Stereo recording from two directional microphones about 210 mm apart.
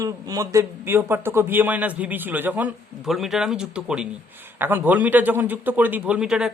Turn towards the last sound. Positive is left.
turn(degrees=-5)  # may be behind; listen again after turning